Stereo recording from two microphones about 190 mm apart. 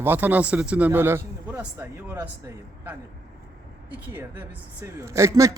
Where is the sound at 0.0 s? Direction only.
10° right (ahead or behind).